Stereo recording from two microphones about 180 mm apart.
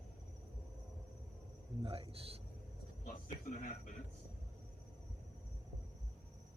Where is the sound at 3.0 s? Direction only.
50° left (ahead or behind).